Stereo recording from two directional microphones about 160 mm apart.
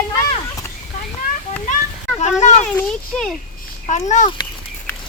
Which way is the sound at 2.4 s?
45° left (ahead or behind).